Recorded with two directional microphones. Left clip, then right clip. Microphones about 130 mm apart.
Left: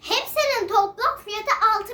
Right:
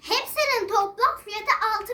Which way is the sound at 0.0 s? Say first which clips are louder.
Left 2 dB; 20° left (ahead or behind).